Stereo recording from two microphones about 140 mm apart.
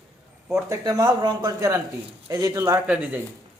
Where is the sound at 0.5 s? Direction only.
25° right (ahead or behind).